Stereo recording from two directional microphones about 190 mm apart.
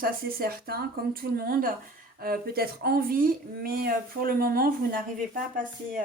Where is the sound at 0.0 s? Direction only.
50° right (ahead or behind).